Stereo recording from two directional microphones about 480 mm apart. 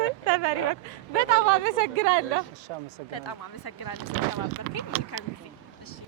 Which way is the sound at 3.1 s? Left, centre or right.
Left.